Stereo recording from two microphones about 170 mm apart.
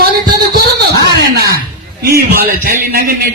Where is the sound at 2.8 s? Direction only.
60° right (ahead or behind).